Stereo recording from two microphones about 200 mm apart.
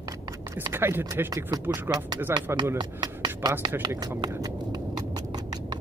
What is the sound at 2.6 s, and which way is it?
Speech, 20° right (ahead or behind).